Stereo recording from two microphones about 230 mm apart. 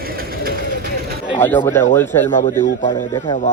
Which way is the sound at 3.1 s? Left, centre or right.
Centre.